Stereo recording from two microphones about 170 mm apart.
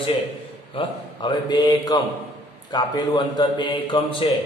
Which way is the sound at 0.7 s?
25° left (ahead or behind).